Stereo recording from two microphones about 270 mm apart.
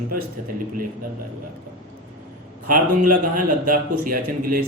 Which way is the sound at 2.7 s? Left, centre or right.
Right.